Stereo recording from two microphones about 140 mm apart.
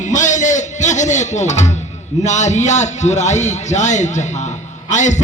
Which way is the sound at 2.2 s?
55° left (ahead or behind).